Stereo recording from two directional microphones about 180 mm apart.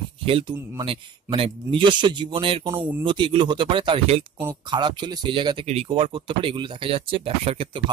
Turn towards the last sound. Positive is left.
turn(degrees=-30)  # may be behind; listen again after turning